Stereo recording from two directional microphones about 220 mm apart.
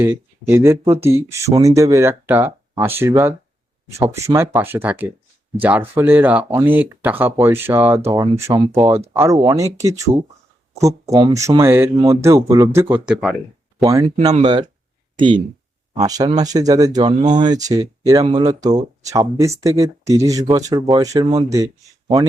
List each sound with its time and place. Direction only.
0.0 s speech: 10° right (ahead or behind)
15.1 s a sound: 20° right (ahead or behind)
16.0 s speech: 15° right (ahead or behind)